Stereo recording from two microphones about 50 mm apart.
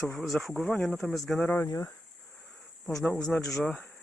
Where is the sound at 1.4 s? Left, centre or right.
Left.